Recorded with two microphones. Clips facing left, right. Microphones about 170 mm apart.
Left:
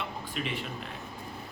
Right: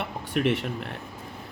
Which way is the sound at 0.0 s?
70° right (ahead or behind).